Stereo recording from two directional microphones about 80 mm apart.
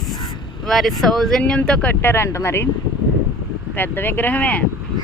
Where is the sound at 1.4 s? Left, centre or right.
Centre.